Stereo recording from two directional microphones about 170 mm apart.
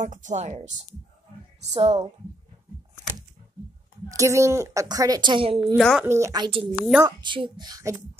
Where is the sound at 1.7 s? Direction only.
35° right (ahead or behind).